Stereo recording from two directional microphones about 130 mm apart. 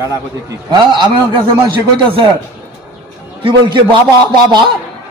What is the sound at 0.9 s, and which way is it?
Speech, 35° right (ahead or behind).